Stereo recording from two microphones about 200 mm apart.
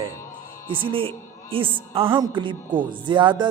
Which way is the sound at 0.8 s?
25° right (ahead or behind).